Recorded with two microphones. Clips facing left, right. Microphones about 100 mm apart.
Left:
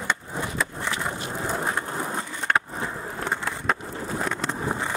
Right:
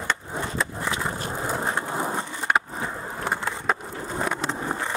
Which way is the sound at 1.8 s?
20° right (ahead or behind).